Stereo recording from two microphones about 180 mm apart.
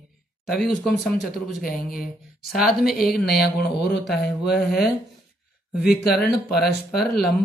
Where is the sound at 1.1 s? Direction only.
Centre (ahead or behind).